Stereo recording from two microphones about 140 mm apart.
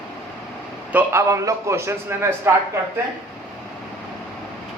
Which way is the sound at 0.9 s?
20° right (ahead or behind).